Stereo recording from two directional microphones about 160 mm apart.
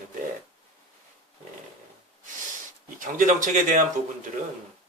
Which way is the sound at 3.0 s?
55° right (ahead or behind).